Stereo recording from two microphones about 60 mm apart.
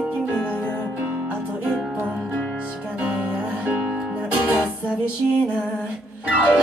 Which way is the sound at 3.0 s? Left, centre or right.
Right.